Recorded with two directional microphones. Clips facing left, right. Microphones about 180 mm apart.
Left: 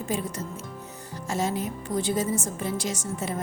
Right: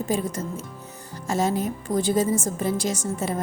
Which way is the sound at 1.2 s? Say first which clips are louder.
Right 4 dB; 40° right (ahead or behind).